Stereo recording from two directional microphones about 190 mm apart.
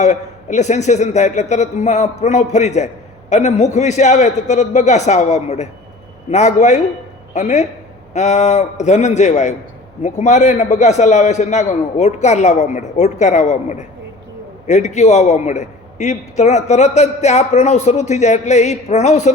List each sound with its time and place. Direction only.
0.0 s a man's voice: 40° left (ahead or behind)